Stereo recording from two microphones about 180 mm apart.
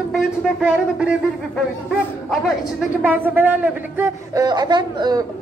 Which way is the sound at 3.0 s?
10° right (ahead or behind).